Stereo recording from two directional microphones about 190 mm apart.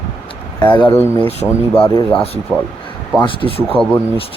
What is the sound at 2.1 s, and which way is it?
Speech, 30° left (ahead or behind).